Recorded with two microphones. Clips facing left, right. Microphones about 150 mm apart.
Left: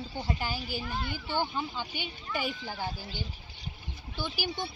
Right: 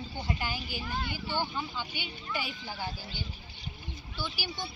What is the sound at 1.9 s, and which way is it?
Speech, 45° left (ahead or behind).